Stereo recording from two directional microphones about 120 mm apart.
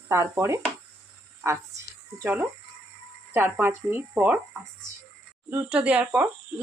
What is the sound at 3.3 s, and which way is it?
Speech, 20° right (ahead or behind).